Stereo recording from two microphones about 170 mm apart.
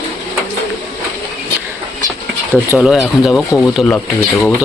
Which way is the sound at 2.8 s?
Centre (ahead or behind).